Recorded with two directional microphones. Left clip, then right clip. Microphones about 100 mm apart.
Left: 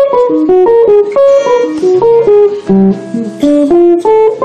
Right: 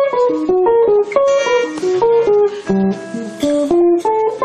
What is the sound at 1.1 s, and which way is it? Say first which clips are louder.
Music: left 6 dB; 15° right (ahead or behind).